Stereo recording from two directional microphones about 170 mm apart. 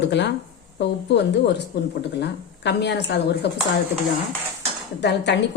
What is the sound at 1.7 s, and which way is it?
Speech, 70° left (ahead or behind).